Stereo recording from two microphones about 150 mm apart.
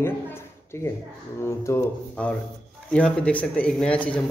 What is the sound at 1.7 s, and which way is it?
Speech, 20° left (ahead or behind).